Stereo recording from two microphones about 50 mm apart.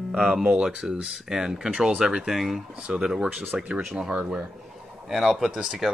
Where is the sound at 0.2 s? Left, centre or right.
Centre.